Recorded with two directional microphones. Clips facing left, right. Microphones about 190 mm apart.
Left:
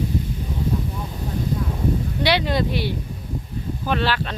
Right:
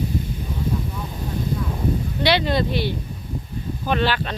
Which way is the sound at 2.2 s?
10° left (ahead or behind).